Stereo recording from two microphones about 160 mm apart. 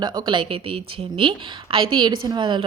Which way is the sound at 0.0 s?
25° right (ahead or behind).